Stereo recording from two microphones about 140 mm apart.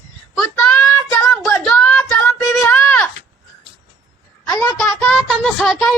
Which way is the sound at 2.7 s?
5° left (ahead or behind).